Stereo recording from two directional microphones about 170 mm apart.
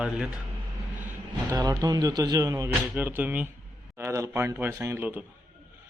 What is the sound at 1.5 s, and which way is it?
A man's voice, 20° right (ahead or behind).